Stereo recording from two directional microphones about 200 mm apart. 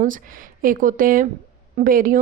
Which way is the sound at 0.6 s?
45° right (ahead or behind).